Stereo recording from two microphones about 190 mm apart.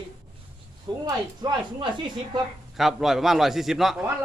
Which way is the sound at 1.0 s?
20° right (ahead or behind).